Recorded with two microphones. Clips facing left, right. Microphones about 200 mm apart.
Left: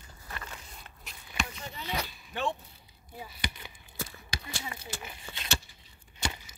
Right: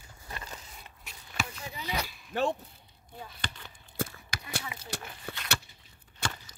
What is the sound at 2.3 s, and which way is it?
Speech, 40° right (ahead or behind).